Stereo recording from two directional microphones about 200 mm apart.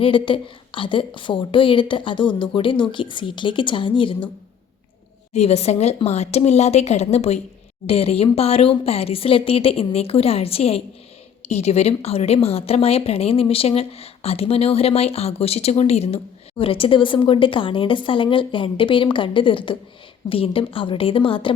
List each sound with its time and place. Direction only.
0.0 s a woman's voice: 25° left (ahead or behind)
5.3 s a woman's voice: 30° left (ahead or behind)